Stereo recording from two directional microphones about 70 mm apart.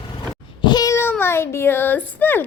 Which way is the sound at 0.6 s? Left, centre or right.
Left.